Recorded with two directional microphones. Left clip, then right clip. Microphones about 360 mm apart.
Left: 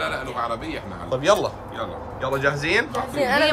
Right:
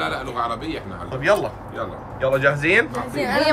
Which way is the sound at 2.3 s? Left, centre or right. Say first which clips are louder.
Right 4 dB; centre.